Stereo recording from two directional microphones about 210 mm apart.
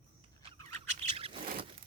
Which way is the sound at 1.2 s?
25° right (ahead or behind).